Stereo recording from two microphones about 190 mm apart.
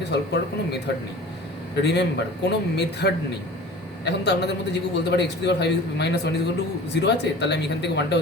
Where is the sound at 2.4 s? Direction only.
60° left (ahead or behind).